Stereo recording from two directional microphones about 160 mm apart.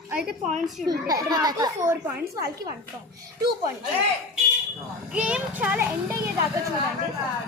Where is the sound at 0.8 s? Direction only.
25° right (ahead or behind).